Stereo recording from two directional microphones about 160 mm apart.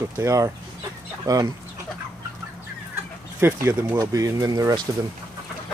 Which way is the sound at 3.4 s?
20° right (ahead or behind).